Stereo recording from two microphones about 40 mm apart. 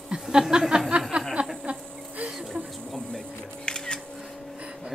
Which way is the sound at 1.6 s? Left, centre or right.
Right.